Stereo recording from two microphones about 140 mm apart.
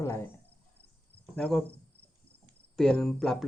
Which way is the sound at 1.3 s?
5° left (ahead or behind).